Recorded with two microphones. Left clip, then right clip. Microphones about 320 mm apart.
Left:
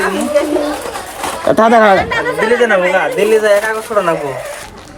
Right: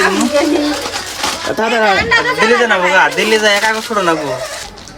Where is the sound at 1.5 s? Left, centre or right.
Left.